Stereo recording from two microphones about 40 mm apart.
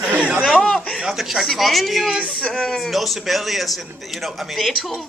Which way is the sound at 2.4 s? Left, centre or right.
Left.